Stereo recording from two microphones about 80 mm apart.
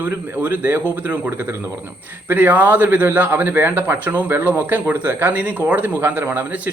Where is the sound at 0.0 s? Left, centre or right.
Right.